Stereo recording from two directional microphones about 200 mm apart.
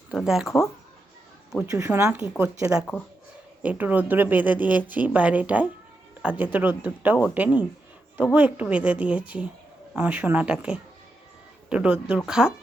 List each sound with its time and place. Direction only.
0.1 s speech: centre (ahead or behind)
1.6 s speech: 10° right (ahead or behind)
2.7 s speech: 5° left (ahead or behind)
3.6 s speech: 10° right (ahead or behind)